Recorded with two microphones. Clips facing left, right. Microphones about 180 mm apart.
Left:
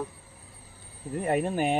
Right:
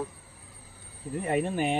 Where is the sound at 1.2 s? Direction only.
45° left (ahead or behind).